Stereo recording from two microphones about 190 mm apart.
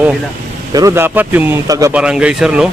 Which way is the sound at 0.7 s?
20° right (ahead or behind).